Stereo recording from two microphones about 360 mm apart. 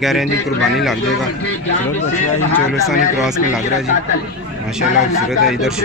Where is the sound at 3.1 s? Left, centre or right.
Centre.